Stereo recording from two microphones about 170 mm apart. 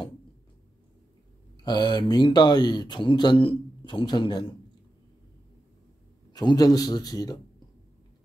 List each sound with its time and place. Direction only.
1.6 s speech: 25° left (ahead or behind)
6.3 s speech: 20° left (ahead or behind)